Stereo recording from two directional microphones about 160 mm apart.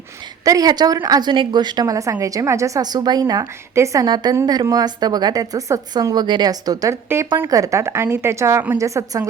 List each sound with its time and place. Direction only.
0.4 s a woman's voice: 25° right (ahead or behind)